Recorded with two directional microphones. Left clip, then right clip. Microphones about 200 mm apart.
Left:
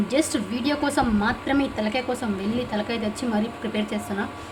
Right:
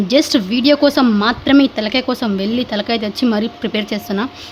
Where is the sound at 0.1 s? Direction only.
50° right (ahead or behind).